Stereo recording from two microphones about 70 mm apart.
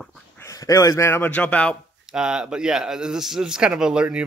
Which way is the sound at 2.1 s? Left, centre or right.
Centre.